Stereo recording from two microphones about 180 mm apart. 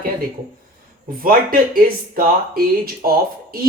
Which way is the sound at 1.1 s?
55° right (ahead or behind).